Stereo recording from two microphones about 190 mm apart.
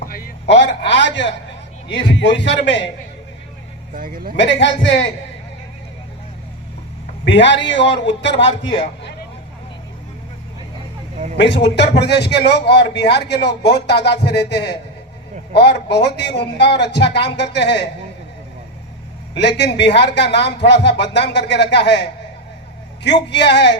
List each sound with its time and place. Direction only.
0.0 s a man's voice: 50° left (ahead or behind); by 2.9 s 70° left (ahead or behind)
3.9 s speech: 50° right (ahead or behind)
4.4 s a man's voice: 70° left (ahead or behind)
7.3 s a man's voice: 70° left (ahead or behind)
11.3 s a man's voice: 65° left (ahead or behind)
19.4 s a man's voice: 65° left (ahead or behind)
23.3 s a man's voice: 65° left (ahead or behind)